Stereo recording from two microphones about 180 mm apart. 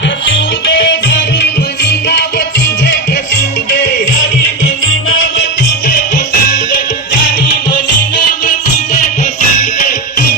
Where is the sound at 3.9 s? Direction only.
50° left (ahead or behind).